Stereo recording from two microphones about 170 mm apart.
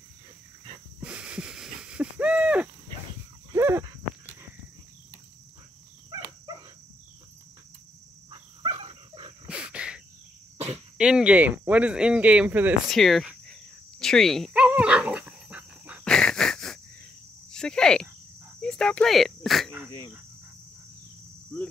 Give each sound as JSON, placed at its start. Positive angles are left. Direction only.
{"t": 1.0, "sound": "a sound", "side_deg": -5}
{"t": 8.3, "sound": "dog", "side_deg": -35}
{"t": 9.5, "sound": "insect", "side_deg": -5}
{"t": 11.0, "sound": "speech", "side_deg": -5}
{"t": 12.9, "sound": "cricket", "side_deg": 0}
{"t": 16.0, "sound": "wheeze", "side_deg": 5}
{"t": 17.5, "sound": "cricket", "side_deg": 5}
{"t": 21.5, "sound": "speech", "side_deg": 10}